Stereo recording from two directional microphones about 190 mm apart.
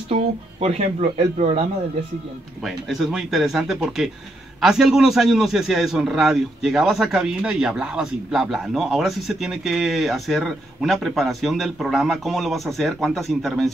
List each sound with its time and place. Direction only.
0.1 s speech: 35° right (ahead or behind)
2.6 s a man's voice: centre (ahead or behind)